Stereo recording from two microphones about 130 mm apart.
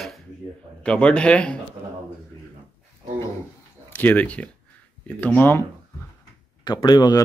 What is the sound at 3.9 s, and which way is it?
Speech, 15° left (ahead or behind).